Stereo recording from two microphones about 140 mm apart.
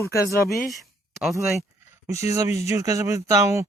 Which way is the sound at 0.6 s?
Centre (ahead or behind).